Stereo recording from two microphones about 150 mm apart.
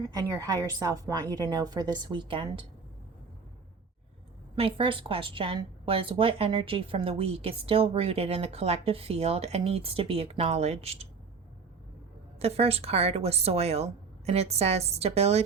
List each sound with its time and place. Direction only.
0.1 s a woman's voice: 25° right (ahead or behind)
4.5 s a woman's voice: 35° right (ahead or behind)
12.4 s a woman's voice: 40° right (ahead or behind)